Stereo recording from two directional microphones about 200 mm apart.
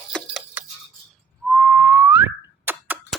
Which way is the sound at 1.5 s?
Centre (ahead or behind).